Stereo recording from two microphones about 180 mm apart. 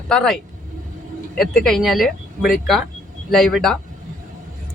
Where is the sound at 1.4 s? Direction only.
Centre (ahead or behind).